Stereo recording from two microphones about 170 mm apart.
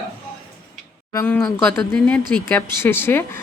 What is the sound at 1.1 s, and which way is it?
A woman's voice, 15° left (ahead or behind).